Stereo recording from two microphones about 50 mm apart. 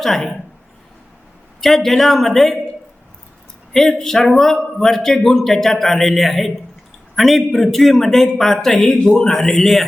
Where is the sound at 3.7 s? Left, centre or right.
Centre.